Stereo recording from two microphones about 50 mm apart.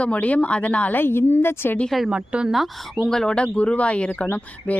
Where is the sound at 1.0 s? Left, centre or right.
Left.